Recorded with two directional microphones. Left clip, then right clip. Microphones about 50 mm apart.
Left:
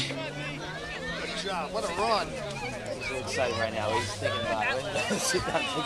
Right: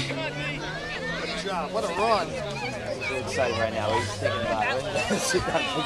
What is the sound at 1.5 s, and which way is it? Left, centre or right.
Speech, left.